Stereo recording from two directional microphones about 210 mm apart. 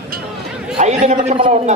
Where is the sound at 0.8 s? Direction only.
35° right (ahead or behind).